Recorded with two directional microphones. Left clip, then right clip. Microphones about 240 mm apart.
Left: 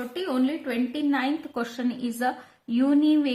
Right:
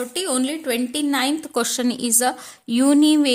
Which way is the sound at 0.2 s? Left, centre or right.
Right.